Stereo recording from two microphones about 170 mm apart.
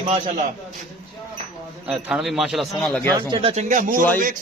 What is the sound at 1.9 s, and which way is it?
A man's voice, 5° right (ahead or behind).